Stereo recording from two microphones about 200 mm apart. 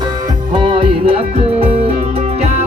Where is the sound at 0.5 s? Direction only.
25° right (ahead or behind).